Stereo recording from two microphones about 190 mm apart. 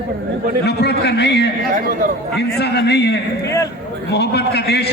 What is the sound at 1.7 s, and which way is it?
Speech, 45° right (ahead or behind).